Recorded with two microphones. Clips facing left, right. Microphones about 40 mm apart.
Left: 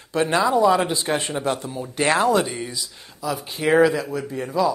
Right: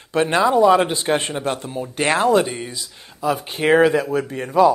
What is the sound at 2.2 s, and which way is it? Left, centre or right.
Speech, centre.